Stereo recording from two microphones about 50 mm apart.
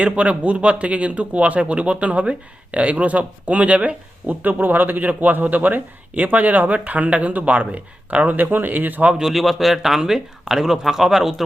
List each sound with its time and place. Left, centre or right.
0.0 s speech: right
9.2 s speech: centre